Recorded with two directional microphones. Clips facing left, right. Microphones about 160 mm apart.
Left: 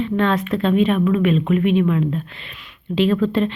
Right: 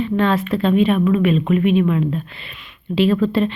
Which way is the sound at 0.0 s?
5° right (ahead or behind).